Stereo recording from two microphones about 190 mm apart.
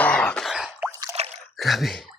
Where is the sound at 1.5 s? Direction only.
Centre (ahead or behind).